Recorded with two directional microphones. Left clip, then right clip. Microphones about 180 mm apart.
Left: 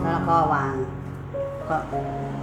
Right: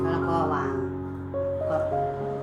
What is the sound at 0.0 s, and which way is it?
Music, 15° left (ahead or behind).